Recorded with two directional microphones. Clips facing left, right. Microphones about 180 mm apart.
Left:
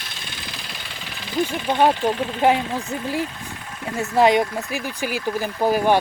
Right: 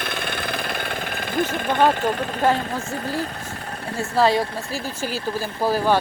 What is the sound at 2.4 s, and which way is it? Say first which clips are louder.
Speech: left 2 dB; 15° left (ahead or behind).